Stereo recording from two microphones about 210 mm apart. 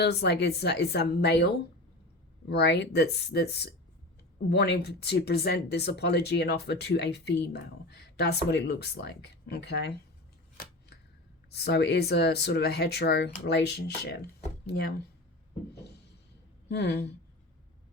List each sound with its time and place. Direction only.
0.0 s speech: 50° left (ahead or behind)
2.5 s speech: 55° left (ahead or behind)
11.5 s speech: 50° left (ahead or behind)
16.6 s speech: 50° left (ahead or behind)